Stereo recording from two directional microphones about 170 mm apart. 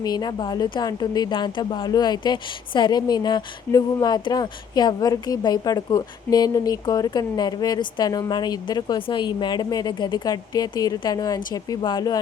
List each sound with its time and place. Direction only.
0.0 s speech: 25° left (ahead or behind)